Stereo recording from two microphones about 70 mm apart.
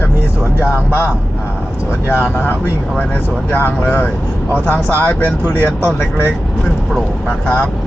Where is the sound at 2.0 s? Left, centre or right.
Left.